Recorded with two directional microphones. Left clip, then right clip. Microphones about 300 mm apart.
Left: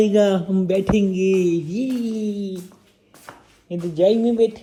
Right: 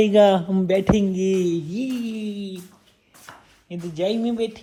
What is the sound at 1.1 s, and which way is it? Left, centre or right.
Speech, centre.